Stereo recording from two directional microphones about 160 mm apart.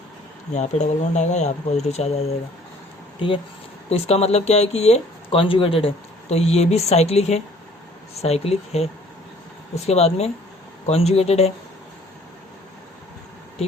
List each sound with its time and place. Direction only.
0.5 s speech: 45° left (ahead or behind)
3.2 s speech: 30° left (ahead or behind)